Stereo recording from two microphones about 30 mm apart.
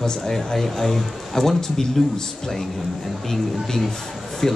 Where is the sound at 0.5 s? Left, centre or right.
Centre.